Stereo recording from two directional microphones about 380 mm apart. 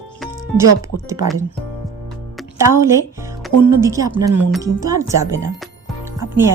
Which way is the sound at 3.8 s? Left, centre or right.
Centre.